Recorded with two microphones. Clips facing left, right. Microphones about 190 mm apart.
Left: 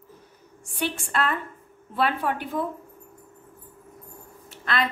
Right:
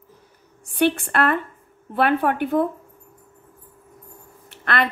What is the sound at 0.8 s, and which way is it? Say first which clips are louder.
A woman's voice: right 8 dB; 65° right (ahead or behind).